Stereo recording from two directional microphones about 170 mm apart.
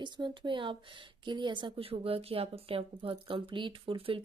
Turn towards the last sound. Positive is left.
turn(degrees=-30)  # may be behind; listen again after turning